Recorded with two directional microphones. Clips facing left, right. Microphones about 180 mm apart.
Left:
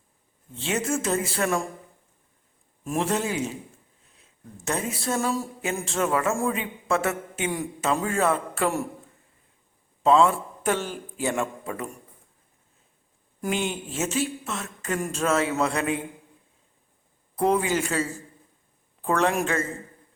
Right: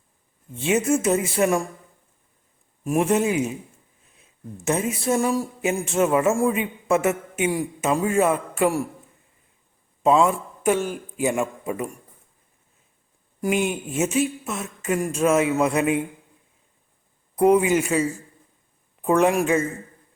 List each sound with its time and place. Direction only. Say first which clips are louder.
0.6 s speech: right 6 dB; 15° right (ahead or behind)
2.8 s speech: right 6 dB; 15° right (ahead or behind)
10.0 s a man's voice: right 1 dB; 15° right (ahead or behind)
13.4 s speech: right 5 dB; 10° right (ahead or behind)
17.3 s speech: right 6 dB; 15° right (ahead or behind)